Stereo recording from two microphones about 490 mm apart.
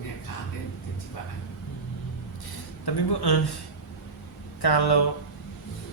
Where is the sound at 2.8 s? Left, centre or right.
Left.